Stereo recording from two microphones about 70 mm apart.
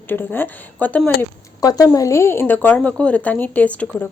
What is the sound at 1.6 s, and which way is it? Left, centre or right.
Speech, left.